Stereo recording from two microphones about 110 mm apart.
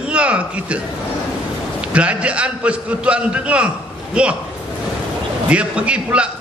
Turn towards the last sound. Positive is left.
turn(degrees=-10)  # may be behind; listen again after turning